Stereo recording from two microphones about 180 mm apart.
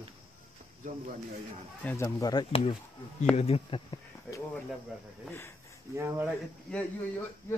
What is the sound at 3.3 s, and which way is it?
Speech, 35° left (ahead or behind).